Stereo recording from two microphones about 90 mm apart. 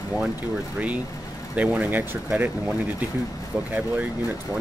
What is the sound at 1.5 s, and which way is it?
Speech, 15° right (ahead or behind).